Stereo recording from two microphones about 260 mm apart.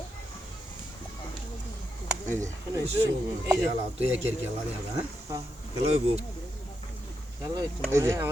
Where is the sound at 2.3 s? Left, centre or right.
Centre.